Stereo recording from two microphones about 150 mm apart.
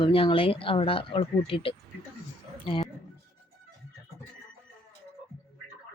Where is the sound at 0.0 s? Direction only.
35° left (ahead or behind).